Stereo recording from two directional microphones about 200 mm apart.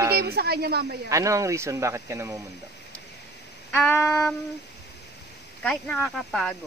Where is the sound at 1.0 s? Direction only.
15° right (ahead or behind).